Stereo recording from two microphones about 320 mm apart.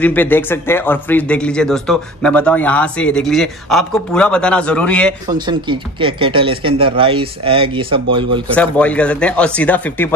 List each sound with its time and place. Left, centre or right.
0.0 s speech: centre
5.2 s speech: centre
8.5 s speech: centre